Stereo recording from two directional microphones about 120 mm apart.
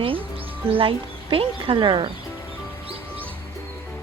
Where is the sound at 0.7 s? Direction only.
50° right (ahead or behind).